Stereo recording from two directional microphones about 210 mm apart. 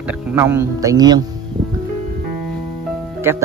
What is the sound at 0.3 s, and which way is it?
Speech, 10° right (ahead or behind).